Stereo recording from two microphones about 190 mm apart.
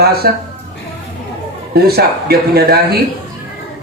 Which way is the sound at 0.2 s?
55° right (ahead or behind).